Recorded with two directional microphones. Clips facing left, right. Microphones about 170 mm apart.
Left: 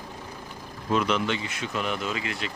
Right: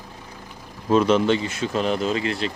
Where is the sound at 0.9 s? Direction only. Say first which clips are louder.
Right 8 dB; 35° right (ahead or behind).